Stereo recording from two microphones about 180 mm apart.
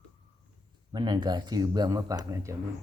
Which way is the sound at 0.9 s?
25° right (ahead or behind).